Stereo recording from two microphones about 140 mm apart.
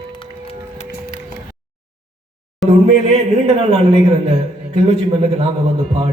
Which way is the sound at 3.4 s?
40° right (ahead or behind).